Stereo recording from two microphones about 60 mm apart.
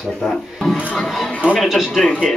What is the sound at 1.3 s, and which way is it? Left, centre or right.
Speech, centre.